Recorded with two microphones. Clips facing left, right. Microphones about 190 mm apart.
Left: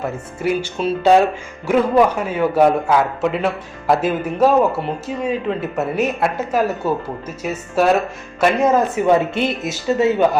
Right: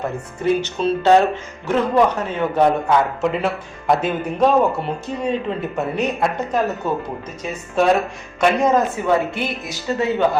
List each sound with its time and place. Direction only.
0.4 s a man's voice: 10° left (ahead or behind)
9.0 s speech: 20° left (ahead or behind)